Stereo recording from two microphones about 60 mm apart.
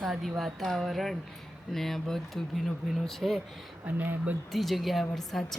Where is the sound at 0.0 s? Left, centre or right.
Centre.